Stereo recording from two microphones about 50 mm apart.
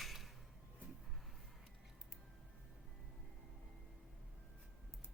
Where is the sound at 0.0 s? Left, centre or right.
Centre.